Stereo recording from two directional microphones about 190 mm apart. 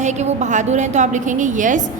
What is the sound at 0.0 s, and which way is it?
A woman's voice, 40° right (ahead or behind).